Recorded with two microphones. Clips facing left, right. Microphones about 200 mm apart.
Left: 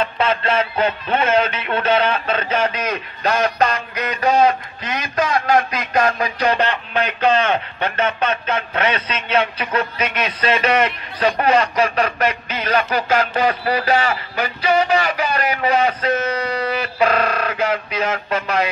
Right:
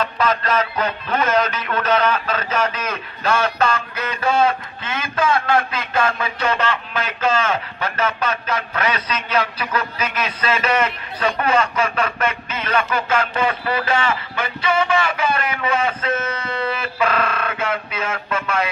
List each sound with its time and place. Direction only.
0.0 s a man's voice: 30° left (ahead or behind)